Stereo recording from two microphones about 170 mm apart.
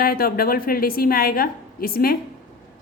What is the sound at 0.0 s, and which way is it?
A woman's voice, 60° left (ahead or behind).